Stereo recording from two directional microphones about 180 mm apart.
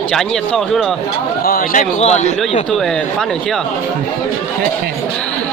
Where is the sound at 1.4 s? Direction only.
50° left (ahead or behind).